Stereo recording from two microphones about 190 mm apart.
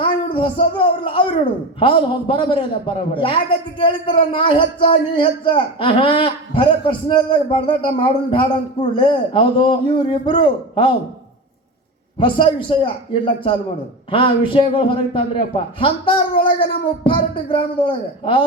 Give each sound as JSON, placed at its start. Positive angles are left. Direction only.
{"t": 0.0, "sound": "a sound", "side_deg": 25}
{"t": 1.8, "sound": "a man's voice", "side_deg": 25}
{"t": 12.2, "sound": "a man's voice", "side_deg": 25}